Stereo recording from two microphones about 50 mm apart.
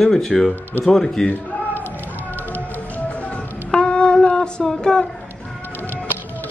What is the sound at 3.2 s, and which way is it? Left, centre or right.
Music, left.